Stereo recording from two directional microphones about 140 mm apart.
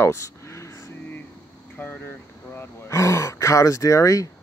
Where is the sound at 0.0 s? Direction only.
20° left (ahead or behind).